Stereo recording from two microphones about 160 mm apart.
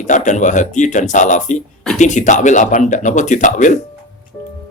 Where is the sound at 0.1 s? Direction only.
50° left (ahead or behind).